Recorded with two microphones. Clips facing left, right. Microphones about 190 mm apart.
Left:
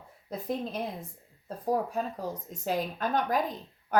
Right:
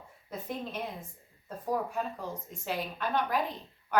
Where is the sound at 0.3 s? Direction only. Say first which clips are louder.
Left 5 dB; 35° left (ahead or behind).